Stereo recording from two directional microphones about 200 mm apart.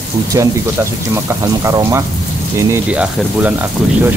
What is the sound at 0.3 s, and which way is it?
Speech, 15° right (ahead or behind).